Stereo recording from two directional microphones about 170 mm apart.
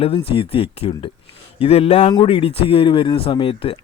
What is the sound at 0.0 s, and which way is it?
Speech, 35° left (ahead or behind).